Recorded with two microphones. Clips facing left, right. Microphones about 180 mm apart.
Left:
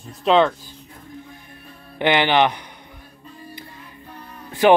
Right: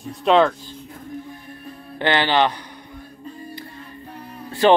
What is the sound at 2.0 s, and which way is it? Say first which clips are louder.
Speech: left 1 dB; 15° left (ahead or behind).